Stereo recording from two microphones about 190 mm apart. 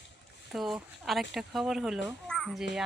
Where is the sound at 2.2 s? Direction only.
Centre (ahead or behind).